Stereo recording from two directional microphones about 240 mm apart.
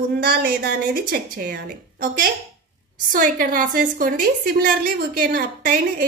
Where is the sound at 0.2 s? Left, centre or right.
Right.